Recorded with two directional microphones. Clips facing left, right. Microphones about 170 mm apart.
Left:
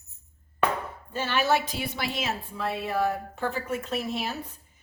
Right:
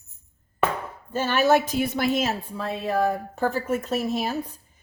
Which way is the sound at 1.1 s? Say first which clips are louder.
Right 5 dB; 45° right (ahead or behind).